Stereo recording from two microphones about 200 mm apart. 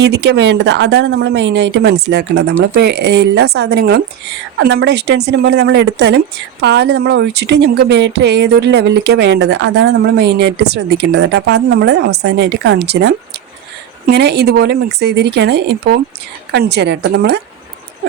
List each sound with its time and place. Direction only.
0.0 s speech: 60° right (ahead or behind)